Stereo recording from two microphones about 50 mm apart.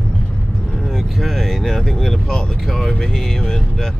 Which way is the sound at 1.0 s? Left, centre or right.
Centre.